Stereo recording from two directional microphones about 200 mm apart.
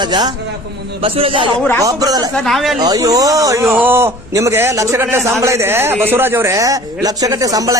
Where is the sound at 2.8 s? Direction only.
20° right (ahead or behind).